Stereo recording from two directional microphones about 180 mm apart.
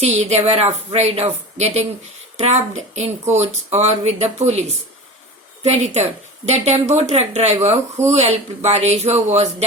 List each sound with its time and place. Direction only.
0.0 s speech: 35° right (ahead or behind)